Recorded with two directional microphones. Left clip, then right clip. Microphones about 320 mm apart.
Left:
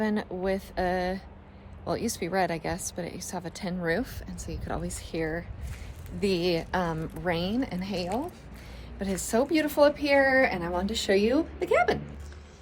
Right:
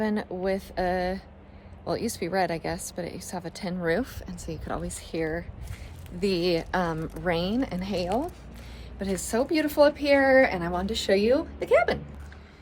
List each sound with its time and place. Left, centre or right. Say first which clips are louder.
0.0 s speech: right 1 dB; centre